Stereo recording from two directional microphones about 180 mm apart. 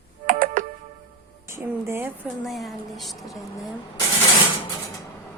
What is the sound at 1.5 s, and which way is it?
Speech, 15° right (ahead or behind).